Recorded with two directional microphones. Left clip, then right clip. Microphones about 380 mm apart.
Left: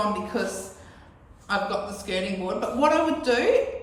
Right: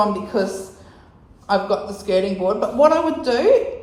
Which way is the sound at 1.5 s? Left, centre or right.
Centre.